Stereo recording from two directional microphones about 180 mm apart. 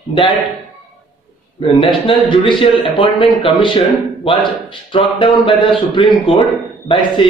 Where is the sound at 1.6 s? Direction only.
30° left (ahead or behind).